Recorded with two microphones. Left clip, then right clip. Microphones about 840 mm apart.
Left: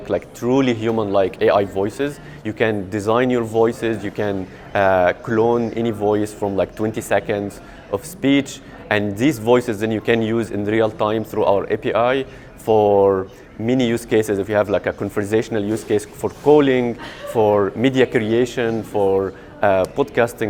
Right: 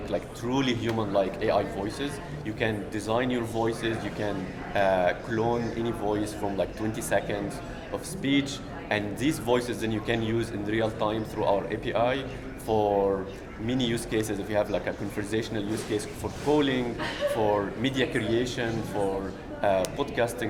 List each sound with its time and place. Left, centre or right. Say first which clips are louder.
0.1 s speech: left 11 dB; left